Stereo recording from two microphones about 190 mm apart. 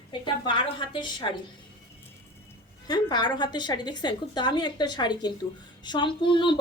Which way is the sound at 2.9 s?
25° left (ahead or behind).